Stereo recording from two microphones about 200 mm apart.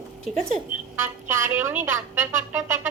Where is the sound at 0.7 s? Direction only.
10° right (ahead or behind).